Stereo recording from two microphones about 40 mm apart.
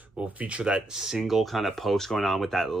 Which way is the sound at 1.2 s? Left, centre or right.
Centre.